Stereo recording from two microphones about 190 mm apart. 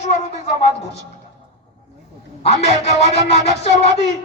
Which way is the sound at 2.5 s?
35° left (ahead or behind).